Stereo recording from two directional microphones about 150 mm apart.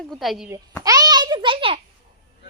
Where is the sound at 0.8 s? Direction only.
25° right (ahead or behind).